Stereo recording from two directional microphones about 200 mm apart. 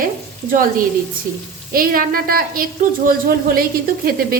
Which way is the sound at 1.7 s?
45° right (ahead or behind).